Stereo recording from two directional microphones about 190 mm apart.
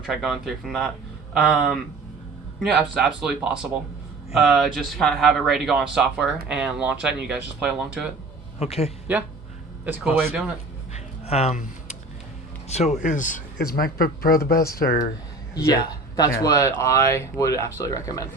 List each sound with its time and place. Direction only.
0.0 s speech: centre (ahead or behind)
8.5 s a man's voice: 30° left (ahead or behind)
9.1 s speech: 10° right (ahead or behind)
11.3 s speech: 35° left (ahead or behind)
12.6 s speech: 35° left (ahead or behind)
15.5 s speech: 20° left (ahead or behind)